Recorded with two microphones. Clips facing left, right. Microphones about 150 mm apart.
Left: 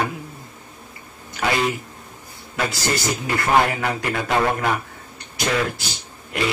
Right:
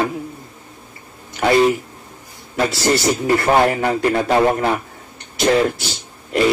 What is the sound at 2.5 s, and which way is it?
A man's voice, 30° right (ahead or behind).